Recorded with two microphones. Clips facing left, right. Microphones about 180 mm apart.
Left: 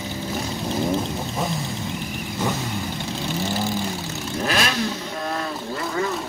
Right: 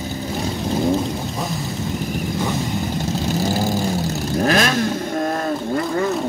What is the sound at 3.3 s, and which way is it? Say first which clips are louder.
Vehicle: right 4 dB; 40° right (ahead or behind).